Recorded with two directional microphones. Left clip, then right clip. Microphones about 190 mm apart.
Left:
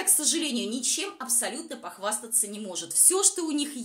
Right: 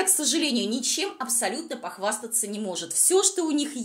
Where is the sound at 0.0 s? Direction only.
15° right (ahead or behind).